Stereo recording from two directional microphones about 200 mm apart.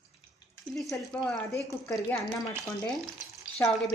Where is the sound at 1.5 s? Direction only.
15° left (ahead or behind).